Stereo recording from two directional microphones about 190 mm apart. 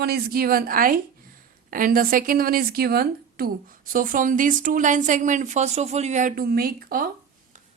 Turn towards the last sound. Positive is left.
turn(degrees=-50)  # may be behind; listen again after turning